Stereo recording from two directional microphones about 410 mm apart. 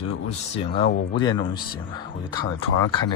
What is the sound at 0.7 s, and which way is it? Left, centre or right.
Speech, centre.